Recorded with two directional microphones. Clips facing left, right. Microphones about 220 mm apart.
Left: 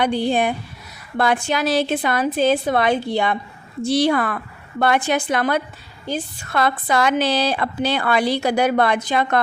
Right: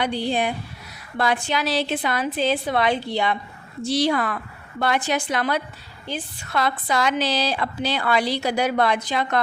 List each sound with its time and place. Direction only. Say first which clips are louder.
0.0 s a woman's voice: left 4 dB; 50° left (ahead or behind)